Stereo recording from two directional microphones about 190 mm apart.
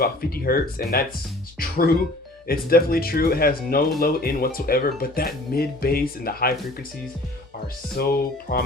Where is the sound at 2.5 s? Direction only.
50° left (ahead or behind).